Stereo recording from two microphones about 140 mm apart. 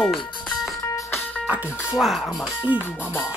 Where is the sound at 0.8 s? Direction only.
15° left (ahead or behind).